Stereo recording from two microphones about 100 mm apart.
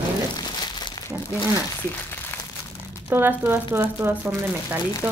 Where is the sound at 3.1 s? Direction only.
20° right (ahead or behind).